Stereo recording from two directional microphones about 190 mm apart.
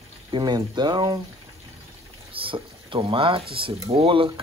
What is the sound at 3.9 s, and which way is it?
Speech, 30° right (ahead or behind).